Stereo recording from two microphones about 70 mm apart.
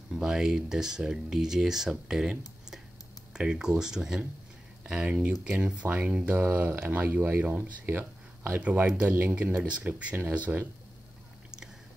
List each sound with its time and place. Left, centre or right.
0.1 s speech: centre; by 8.8 s right
9.0 s speech: right